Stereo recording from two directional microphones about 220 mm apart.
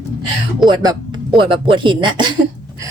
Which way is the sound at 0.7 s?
20° right (ahead or behind).